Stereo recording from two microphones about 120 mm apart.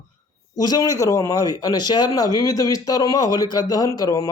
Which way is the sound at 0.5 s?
35° left (ahead or behind).